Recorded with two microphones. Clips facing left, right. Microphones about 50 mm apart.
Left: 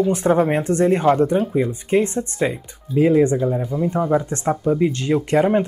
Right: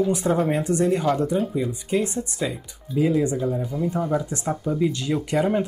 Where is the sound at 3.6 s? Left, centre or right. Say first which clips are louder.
Left 4 dB; centre.